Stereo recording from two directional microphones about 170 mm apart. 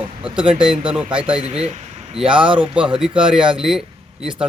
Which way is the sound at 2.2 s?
5° right (ahead or behind).